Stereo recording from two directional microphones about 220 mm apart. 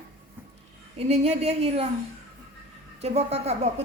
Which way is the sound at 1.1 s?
30° right (ahead or behind).